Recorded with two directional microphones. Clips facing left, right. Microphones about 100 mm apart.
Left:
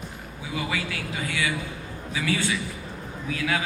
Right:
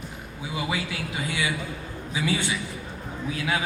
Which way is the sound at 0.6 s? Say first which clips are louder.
Right 1 dB; 20° right (ahead or behind).